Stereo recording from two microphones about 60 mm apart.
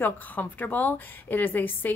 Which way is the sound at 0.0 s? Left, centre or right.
Left.